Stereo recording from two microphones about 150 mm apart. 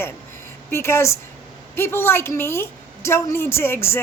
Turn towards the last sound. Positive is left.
turn(degrees=15)  # may be behind; listen again after turning